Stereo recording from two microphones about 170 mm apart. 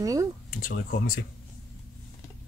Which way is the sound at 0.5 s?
50° left (ahead or behind).